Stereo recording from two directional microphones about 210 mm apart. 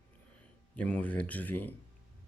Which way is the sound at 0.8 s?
5° left (ahead or behind).